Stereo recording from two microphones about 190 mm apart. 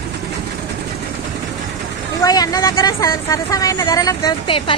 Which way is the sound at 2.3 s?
20° left (ahead or behind).